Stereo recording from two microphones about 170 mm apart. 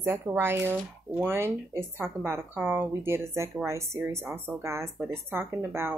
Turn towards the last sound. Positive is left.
turn(degrees=-15)  # may be behind; listen again after turning